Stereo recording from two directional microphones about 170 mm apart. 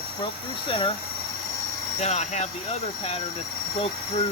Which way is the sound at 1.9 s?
40° left (ahead or behind).